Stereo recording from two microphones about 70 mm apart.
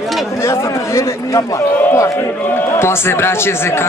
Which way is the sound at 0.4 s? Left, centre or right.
Left.